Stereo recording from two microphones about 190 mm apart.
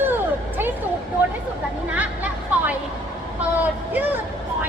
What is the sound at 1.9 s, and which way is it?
A woman's voice, 10° right (ahead or behind).